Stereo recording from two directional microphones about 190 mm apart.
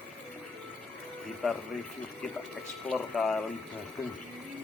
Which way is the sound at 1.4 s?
Centre (ahead or behind).